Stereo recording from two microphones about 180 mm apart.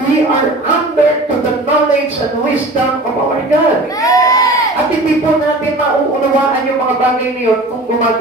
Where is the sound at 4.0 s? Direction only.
20° left (ahead or behind).